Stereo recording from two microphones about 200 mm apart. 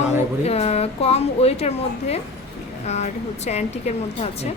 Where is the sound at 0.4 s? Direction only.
30° left (ahead or behind).